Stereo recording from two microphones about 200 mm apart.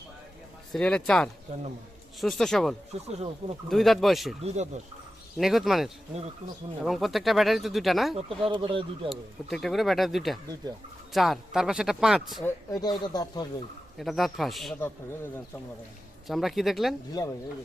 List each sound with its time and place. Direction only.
0.7 s speech: 5° left (ahead or behind)
1.5 s speech: 35° right (ahead or behind)
2.2 s speech: centre (ahead or behind)
2.9 s speech: 30° right (ahead or behind)
3.7 s speech: centre (ahead or behind)
4.4 s speech: 35° right (ahead or behind)
5.4 s speech: centre (ahead or behind)
8.1 s speech: 25° right (ahead or behind)
9.0 s speech: centre (ahead or behind)
12.4 s speech: 20° left (ahead or behind)
14.0 s speech: centre (ahead or behind)
14.8 s speech: 10° left (ahead or behind)
16.2 s speech: centre (ahead or behind)